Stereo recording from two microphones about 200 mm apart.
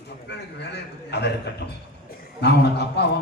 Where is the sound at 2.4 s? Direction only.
55° left (ahead or behind).